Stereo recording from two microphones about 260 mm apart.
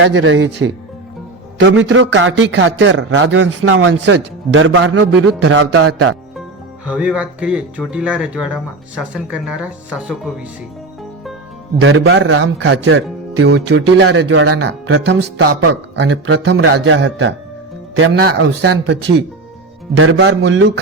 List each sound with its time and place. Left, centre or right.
0.0 s a man's voice: right
6.8 s speech: centre
11.8 s a man's voice: right
20.0 s a man's voice: right